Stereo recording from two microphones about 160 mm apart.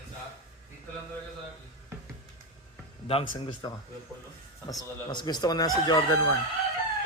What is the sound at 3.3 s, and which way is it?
Speech, 30° left (ahead or behind).